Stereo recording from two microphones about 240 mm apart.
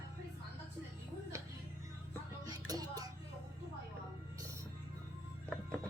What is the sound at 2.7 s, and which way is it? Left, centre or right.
Music, centre.